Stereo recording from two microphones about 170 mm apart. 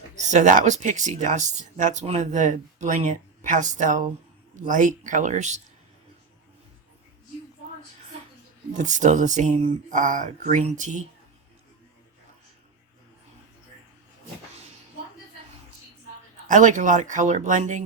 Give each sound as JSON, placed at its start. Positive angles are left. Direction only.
{"t": 0.2, "sound": "speech", "side_deg": -45}
{"t": 8.7, "sound": "speech", "side_deg": -45}
{"t": 16.5, "sound": "speech", "side_deg": -50}